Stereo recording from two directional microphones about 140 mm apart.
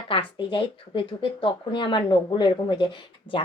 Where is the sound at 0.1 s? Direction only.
35° left (ahead or behind).